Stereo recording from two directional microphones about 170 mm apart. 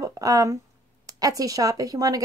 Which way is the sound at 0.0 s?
20° right (ahead or behind).